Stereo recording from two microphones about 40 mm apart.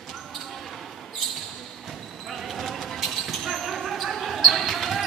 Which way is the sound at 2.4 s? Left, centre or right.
Centre.